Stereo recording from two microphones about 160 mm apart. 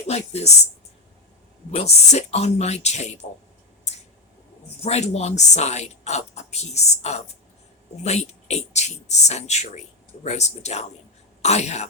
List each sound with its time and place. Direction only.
0.1 s speech: 40° left (ahead or behind)
1.7 s a woman's voice: 45° left (ahead or behind)
4.8 s a woman's voice: 40° left (ahead or behind)